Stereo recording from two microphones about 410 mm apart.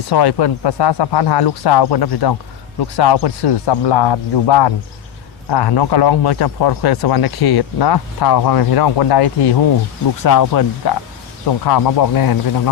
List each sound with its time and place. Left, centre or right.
0.1 s speech: left
10.2 s speech: left